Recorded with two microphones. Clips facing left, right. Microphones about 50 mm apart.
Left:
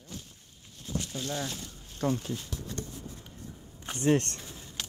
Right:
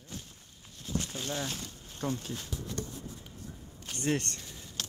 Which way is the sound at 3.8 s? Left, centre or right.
Centre.